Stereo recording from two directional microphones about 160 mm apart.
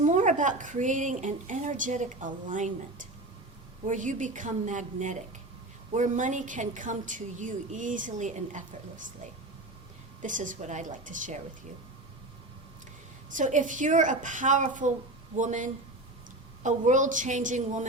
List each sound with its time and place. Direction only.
0.0 s a woman's voice: 50° right (ahead or behind)
10.2 s a woman's voice: 55° right (ahead or behind)
13.3 s a woman's voice: 50° right (ahead or behind)